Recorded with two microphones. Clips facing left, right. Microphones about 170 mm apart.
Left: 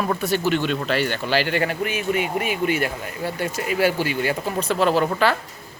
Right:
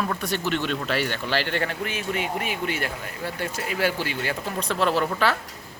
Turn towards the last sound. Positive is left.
turn(degrees=0)  # may be behind; listen again after turning